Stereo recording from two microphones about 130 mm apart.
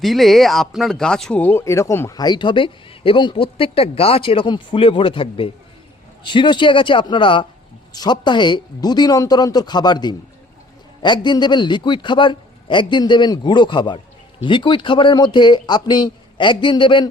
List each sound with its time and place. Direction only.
0.0 s speech: centre (ahead or behind); by 17.1 s 40° left (ahead or behind)